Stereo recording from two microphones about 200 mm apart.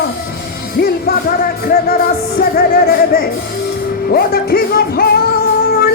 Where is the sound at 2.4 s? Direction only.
50° left (ahead or behind).